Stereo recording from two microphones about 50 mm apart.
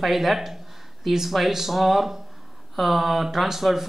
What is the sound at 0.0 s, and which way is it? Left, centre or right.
Speech, centre.